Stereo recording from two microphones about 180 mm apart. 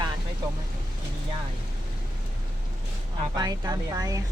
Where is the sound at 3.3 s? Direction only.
20° right (ahead or behind).